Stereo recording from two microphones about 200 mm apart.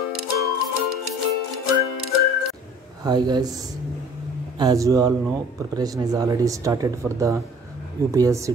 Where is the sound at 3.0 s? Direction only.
20° right (ahead or behind).